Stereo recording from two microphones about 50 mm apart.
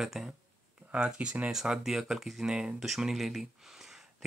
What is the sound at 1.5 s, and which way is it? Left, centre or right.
Speech, centre.